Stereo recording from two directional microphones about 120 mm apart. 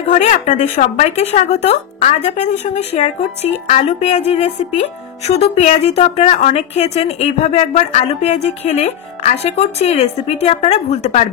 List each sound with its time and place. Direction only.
0.1 s speech: 85° left
5.2 s a woman's voice: 70° left (ahead or behind)